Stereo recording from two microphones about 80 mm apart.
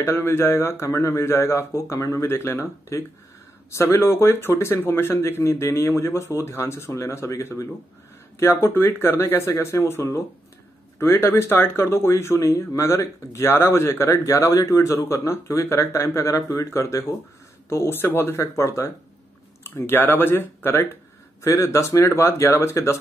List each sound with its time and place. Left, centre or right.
0.0 s speech: left
19.6 s speech: left